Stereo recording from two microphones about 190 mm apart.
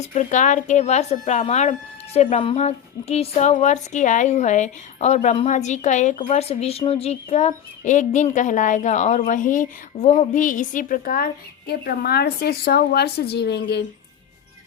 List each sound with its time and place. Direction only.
0.0 s a woman's voice: 35° left (ahead or behind); by 13.8 s 60° left (ahead or behind)